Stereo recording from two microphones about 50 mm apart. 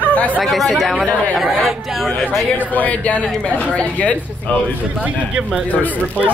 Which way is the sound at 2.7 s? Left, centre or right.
Left.